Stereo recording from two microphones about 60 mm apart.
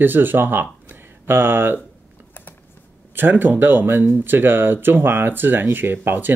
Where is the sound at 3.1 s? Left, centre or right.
Right.